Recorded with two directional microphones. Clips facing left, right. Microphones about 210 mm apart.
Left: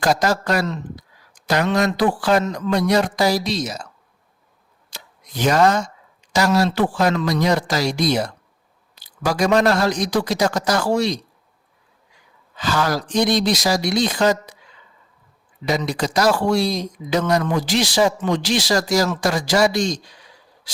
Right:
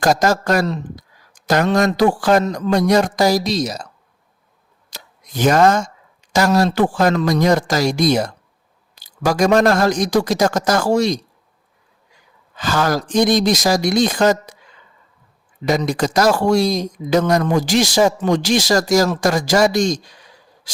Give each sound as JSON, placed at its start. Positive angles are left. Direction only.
{"t": 0.0, "sound": "speech", "side_deg": -45}
{"t": 4.9, "sound": "a sound", "side_deg": -45}
{"t": 6.3, "sound": "speech", "side_deg": -50}
{"t": 12.5, "sound": "speech", "side_deg": -45}
{"t": 15.6, "sound": "speech", "side_deg": -45}